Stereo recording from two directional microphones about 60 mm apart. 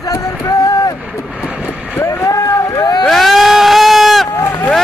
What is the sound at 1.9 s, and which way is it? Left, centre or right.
Speech, left.